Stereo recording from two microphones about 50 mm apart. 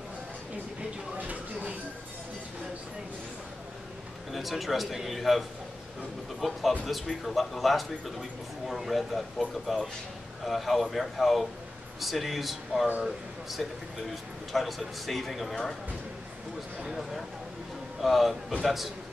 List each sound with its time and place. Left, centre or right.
1.1 s a sound: right
4.3 s a man's voice: centre
6.4 s a man's voice: centre
16.8 s a man's voice: centre